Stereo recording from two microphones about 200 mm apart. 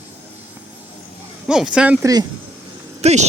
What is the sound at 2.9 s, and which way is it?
Speech, 35° right (ahead or behind).